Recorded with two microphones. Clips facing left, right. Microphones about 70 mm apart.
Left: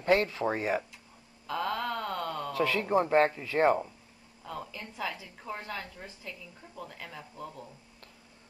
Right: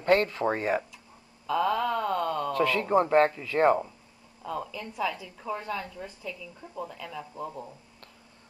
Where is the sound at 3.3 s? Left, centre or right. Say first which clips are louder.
Right 2 dB; centre.